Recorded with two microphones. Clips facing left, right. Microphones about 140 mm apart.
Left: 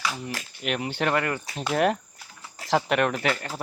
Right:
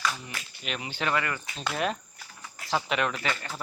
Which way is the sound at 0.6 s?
65° left (ahead or behind).